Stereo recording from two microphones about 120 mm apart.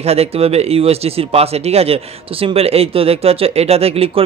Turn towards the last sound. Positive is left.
turn(degrees=-55)  # may be behind; listen again after turning